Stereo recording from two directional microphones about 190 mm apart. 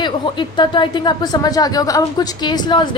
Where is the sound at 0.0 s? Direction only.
25° left (ahead or behind).